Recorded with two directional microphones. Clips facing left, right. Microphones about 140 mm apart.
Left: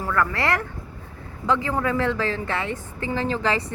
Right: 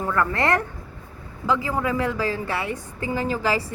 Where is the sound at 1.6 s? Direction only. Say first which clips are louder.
Left 1 dB; 10° right (ahead or behind).